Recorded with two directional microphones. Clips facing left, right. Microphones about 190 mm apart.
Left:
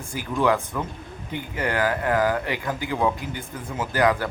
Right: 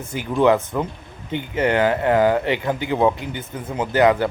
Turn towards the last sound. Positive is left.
turn(degrees=-25)  # may be behind; listen again after turning